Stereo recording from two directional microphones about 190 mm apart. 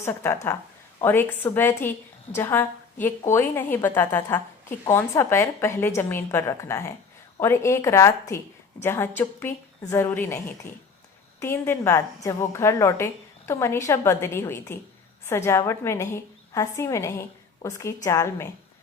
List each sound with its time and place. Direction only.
0.0 s a woman's voice: 15° left (ahead or behind)